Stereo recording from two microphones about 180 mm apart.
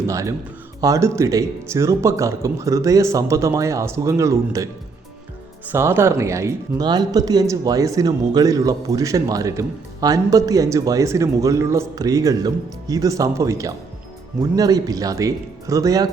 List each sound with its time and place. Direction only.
0.1 s speech: 15° right (ahead or behind)
5.7 s speech: 15° right (ahead or behind)